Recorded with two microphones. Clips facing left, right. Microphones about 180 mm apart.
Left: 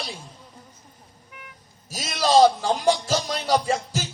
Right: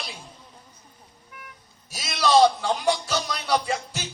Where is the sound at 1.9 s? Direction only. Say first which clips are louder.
Even; 40° left (ahead or behind).